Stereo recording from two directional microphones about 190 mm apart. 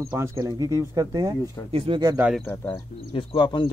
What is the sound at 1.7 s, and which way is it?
Speech, 30° right (ahead or behind).